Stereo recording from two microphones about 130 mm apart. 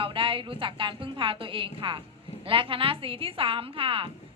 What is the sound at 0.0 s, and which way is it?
A woman's voice, 45° right (ahead or behind).